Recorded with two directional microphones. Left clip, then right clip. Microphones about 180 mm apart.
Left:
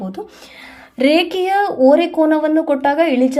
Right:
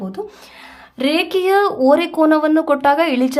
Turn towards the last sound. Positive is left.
turn(degrees=-10)  # may be behind; listen again after turning